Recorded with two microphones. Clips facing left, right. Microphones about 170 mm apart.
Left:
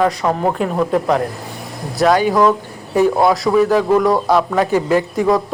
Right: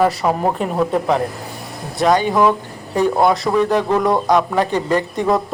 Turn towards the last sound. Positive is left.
turn(degrees=0)  # may be behind; listen again after turning